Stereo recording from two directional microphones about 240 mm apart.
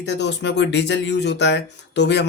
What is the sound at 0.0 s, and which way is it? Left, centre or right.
Speech, left.